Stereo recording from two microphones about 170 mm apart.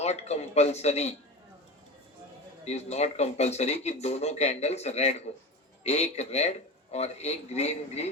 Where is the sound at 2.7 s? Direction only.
40° left (ahead or behind).